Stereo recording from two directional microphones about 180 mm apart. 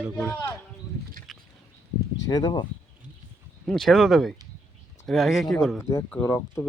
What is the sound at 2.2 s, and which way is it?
Speech, 25° left (ahead or behind).